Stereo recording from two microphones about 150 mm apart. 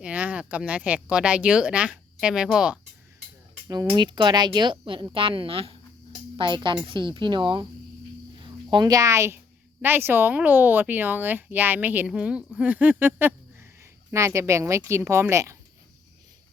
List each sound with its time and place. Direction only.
0.0 s speech: 10° right (ahead or behind)
3.9 s a woman's voice: 30° right (ahead or behind)